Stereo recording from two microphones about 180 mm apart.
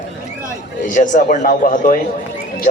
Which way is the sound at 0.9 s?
45° left (ahead or behind).